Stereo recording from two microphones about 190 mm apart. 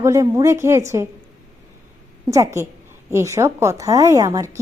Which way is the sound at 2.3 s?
15° right (ahead or behind).